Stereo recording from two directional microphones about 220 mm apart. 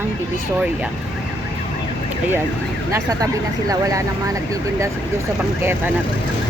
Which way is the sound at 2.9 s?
15° right (ahead or behind).